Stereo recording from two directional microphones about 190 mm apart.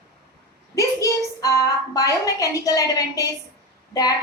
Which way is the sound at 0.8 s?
15° left (ahead or behind).